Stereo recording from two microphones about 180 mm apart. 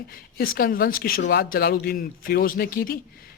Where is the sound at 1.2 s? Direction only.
70° left (ahead or behind).